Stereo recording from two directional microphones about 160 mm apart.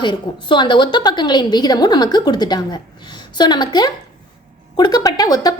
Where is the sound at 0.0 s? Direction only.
30° left (ahead or behind).